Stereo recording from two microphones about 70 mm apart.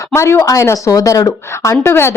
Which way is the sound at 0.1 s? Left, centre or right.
Left.